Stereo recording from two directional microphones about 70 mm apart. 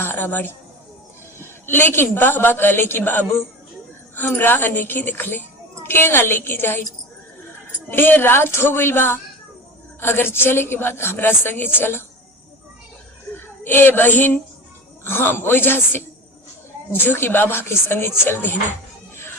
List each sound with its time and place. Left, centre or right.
0.0 s a woman's voice: left
1.6 s a woman's voice: left
7.9 s a woman's voice: left
13.3 s a woman's voice: left